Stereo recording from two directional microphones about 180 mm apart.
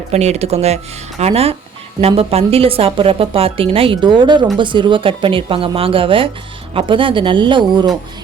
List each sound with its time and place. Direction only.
0.1 s speech: 35° right (ahead or behind)